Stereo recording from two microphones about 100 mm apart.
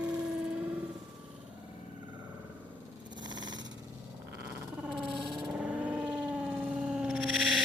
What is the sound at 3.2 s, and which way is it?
Vehicle, 45° right (ahead or behind).